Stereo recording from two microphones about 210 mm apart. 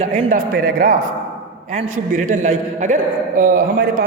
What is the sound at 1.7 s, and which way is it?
A woman's voice, 35° right (ahead or behind).